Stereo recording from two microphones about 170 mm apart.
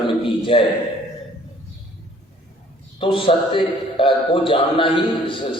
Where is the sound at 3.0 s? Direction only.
30° left (ahead or behind).